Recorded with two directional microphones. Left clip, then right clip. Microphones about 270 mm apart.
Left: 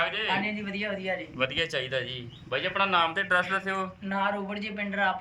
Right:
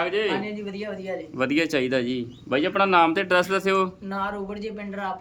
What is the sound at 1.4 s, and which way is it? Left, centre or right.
A man's voice, right.